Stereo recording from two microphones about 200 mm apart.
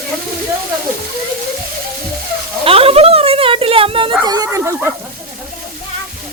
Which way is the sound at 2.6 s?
30° right (ahead or behind).